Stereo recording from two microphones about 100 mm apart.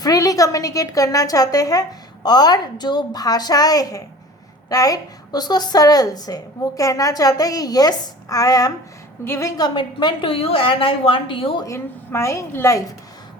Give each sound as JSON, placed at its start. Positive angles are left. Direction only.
{"t": 0.0, "sound": "a woman's voice", "side_deg": 40}
{"t": 9.2, "sound": "a woman's voice", "side_deg": 25}
{"t": 9.6, "sound": "a woman's voice", "side_deg": 45}
{"t": 11.6, "sound": "a woman's voice", "side_deg": 30}